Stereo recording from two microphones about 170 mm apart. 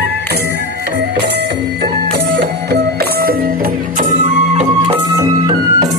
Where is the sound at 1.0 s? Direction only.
85° right; by 4.6 s 40° right (ahead or behind).